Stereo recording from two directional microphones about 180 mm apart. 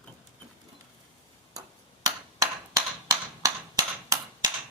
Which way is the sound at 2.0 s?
20° right (ahead or behind).